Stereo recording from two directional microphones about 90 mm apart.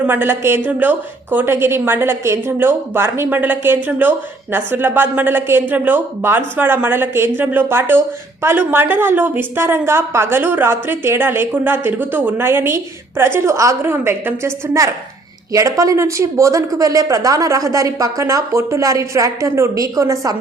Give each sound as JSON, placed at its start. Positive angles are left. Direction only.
{"t": 0.0, "sound": "a woman's voice", "side_deg": -20}